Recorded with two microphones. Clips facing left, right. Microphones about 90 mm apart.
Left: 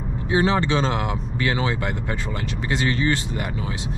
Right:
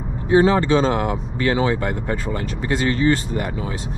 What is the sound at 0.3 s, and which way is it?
Speech, 40° right (ahead or behind).